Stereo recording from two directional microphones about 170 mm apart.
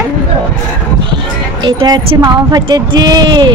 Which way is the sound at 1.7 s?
25° right (ahead or behind).